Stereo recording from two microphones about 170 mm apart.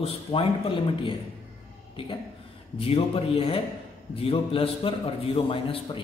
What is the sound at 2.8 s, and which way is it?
A man's voice, 35° left (ahead or behind).